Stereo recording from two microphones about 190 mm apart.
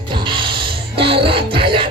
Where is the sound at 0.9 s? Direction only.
30° right (ahead or behind).